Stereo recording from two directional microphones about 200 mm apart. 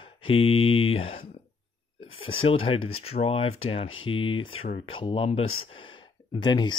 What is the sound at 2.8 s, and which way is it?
Speech, 90° left.